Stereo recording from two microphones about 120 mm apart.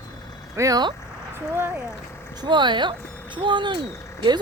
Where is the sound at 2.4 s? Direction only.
40° right (ahead or behind).